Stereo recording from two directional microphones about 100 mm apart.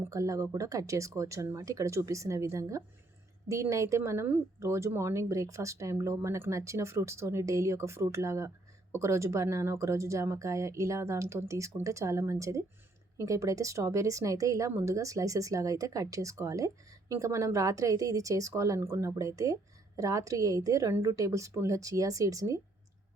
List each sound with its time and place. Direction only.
0.1 s speech: 30° right (ahead or behind)